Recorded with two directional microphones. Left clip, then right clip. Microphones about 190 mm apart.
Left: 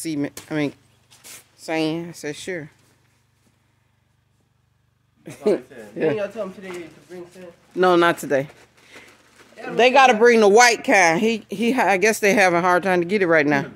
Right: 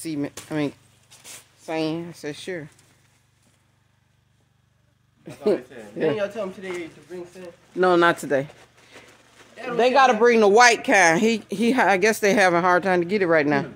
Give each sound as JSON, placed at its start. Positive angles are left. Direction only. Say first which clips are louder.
{"t": 0.0, "sound": "speech", "louder": "left 3 dB", "side_deg": 20}
{"t": 5.2, "sound": "speech", "louder": "left 2 dB", "side_deg": 15}
{"t": 7.7, "sound": "speech", "louder": "left 1 dB", "side_deg": 15}
{"t": 9.8, "sound": "speech", "louder": "left 3 dB", "side_deg": 25}
{"t": 11.0, "sound": "speech", "louder": "left 2 dB", "side_deg": 0}
{"t": 11.2, "sound": "speech", "louder": "even", "side_deg": -10}